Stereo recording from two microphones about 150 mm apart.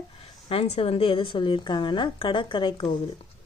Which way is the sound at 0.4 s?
40° left (ahead or behind).